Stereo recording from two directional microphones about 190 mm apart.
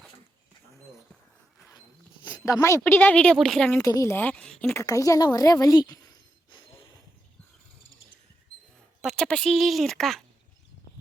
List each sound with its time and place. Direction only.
2.5 s a woman's voice: 15° left (ahead or behind)
4.8 s speech: 15° left (ahead or behind)
9.0 s speech: centre (ahead or behind)